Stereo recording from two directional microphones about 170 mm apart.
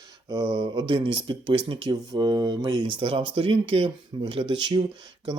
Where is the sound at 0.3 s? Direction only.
20° right (ahead or behind).